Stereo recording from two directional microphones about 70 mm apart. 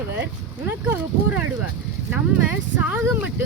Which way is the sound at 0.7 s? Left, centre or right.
Right.